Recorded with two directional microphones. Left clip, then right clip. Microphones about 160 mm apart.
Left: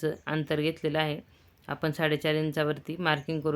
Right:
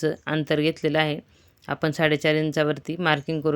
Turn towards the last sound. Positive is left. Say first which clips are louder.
# right 5 dB
turn(degrees=-35)  # may be behind; listen again after turning